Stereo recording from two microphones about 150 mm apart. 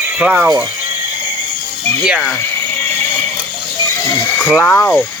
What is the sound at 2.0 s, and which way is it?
Speech, 5° right (ahead or behind).